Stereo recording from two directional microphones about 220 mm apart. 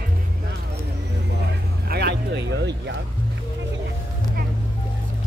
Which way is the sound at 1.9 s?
50° right (ahead or behind).